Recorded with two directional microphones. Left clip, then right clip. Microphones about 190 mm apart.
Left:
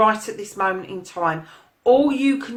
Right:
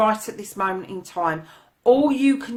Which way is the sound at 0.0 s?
35° right (ahead or behind).